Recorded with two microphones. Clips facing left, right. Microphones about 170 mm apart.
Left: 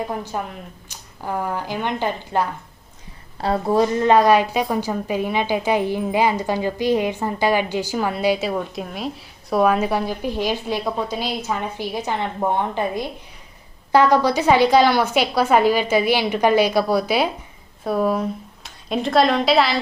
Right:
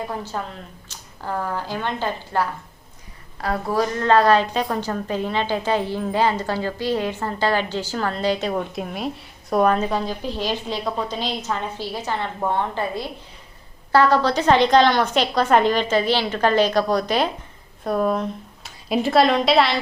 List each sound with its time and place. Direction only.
0.1 s a woman's voice: 15° left (ahead or behind)